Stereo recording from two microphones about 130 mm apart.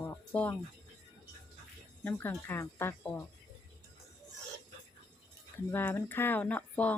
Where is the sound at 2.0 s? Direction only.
15° left (ahead or behind).